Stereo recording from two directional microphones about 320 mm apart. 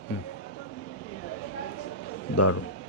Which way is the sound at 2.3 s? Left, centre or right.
Left.